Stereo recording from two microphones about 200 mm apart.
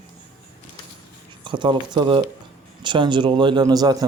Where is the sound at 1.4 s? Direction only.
25° right (ahead or behind).